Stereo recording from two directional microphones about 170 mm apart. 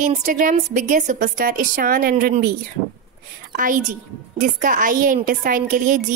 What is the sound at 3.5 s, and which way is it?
A woman's voice, 50° right (ahead or behind).